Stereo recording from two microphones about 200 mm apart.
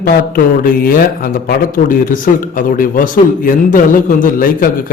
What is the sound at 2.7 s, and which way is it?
A man's voice, 45° left (ahead or behind).